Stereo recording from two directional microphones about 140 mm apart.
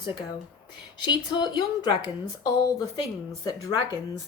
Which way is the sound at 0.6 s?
30° left (ahead or behind).